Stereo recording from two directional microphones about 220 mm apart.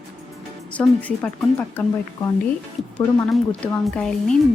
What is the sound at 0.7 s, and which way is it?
Speech, 5° left (ahead or behind).